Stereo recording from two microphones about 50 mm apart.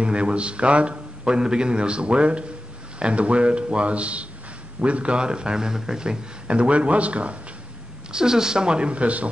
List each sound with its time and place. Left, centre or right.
0.0 s speech: right
8.1 s speech: centre